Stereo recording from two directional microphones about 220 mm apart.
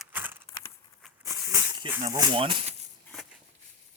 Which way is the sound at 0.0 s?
10° right (ahead or behind).